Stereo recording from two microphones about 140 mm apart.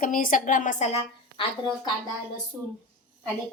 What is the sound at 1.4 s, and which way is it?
Speech, 35° left (ahead or behind).